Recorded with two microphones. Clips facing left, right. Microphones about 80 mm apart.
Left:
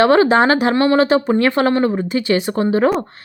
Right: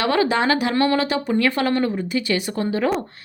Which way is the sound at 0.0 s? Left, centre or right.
Left.